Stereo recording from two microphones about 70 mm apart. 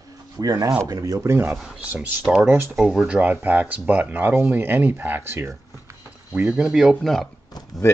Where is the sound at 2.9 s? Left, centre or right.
Centre; by 5.5 s right.